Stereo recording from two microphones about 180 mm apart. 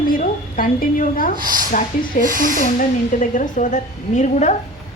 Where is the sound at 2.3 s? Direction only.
50° right (ahead or behind).